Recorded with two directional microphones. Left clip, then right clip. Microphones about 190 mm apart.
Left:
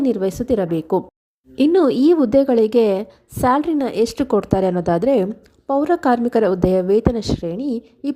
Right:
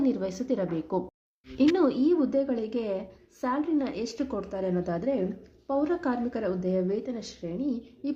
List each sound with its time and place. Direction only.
0.0 s a woman's voice: 45° left (ahead or behind)